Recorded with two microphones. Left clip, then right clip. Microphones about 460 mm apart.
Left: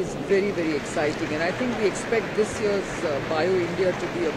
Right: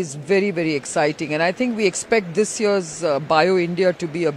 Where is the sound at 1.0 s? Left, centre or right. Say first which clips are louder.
Right 7 dB; right.